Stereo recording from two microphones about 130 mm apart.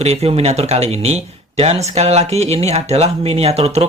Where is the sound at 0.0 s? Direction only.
50° right (ahead or behind).